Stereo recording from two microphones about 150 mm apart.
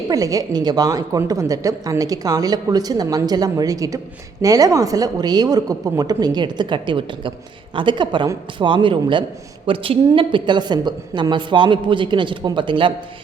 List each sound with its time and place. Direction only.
0.1 s a woman's voice: 25° right (ahead or behind)